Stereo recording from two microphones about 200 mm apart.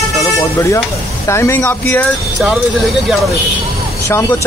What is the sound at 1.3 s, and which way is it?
Speech, 15° left (ahead or behind).